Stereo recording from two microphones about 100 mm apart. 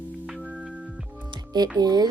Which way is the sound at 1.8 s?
45° right (ahead or behind).